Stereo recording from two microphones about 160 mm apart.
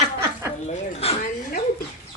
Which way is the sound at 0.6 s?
40° left (ahead or behind).